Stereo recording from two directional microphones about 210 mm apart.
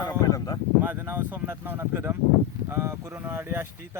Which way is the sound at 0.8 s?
10° right (ahead or behind).